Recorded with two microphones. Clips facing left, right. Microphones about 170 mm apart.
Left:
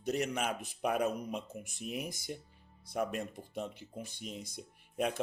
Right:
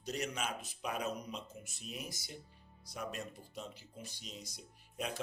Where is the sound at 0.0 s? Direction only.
55° left (ahead or behind).